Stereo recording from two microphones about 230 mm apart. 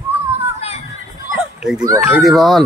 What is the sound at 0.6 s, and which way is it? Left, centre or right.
Children playing, left.